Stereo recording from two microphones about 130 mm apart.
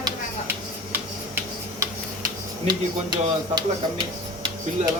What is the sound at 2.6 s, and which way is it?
Speech, 35° right (ahead or behind).